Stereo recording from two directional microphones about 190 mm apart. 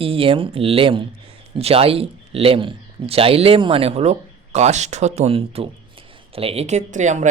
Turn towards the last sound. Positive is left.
turn(degrees=-40)  # may be behind; listen again after turning